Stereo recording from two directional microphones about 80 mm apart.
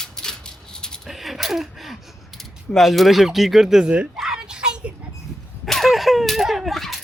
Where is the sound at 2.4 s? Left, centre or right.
Centre.